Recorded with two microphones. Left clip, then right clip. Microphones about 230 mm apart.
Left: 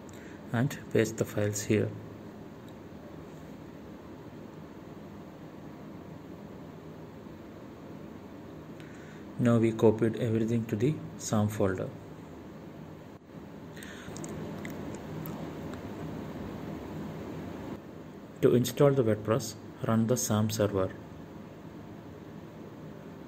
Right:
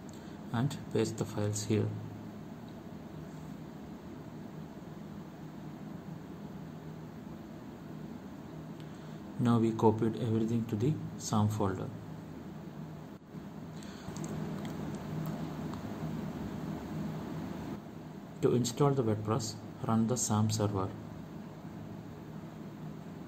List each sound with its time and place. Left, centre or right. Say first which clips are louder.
0.5 s speech: left 5 dB; centre
9.4 s speech: left 4 dB; centre
18.4 s speech: left 6 dB; centre